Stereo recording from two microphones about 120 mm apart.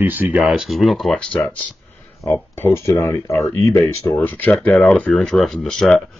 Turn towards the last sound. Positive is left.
turn(degrees=5)  # may be behind; listen again after turning